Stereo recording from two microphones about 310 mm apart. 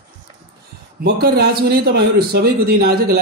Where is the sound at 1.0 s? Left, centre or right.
Right.